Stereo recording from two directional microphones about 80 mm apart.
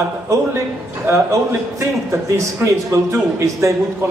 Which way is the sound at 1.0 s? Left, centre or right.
Right.